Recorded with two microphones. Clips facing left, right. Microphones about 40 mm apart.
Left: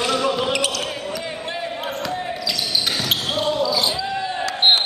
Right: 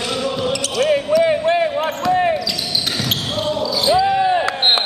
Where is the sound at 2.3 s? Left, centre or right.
Centre.